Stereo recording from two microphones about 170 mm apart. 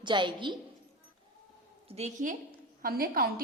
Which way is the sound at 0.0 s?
25° right (ahead or behind).